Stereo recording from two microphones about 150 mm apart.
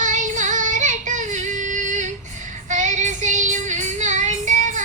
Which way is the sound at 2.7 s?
55° right (ahead or behind).